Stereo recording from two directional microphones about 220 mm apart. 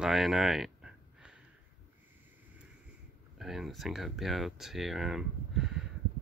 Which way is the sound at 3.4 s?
Centre (ahead or behind).